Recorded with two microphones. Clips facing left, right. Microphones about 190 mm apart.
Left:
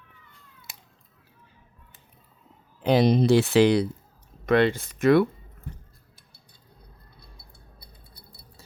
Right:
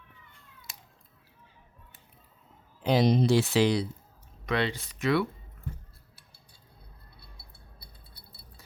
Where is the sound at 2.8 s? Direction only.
60° left (ahead or behind).